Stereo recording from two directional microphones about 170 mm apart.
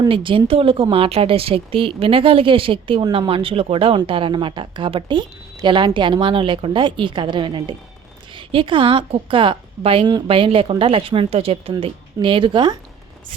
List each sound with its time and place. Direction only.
0.0 s a woman's voice: 30° right (ahead or behind)